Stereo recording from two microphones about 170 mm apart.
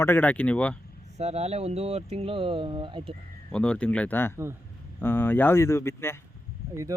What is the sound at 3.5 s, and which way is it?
Speech, 5° left (ahead or behind).